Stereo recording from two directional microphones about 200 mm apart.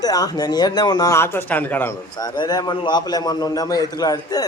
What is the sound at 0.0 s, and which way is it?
A man's voice, 20° left (ahead or behind).